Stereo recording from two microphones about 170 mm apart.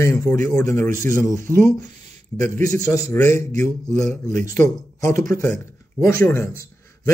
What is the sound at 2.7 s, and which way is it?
A man's voice, 20° left (ahead or behind).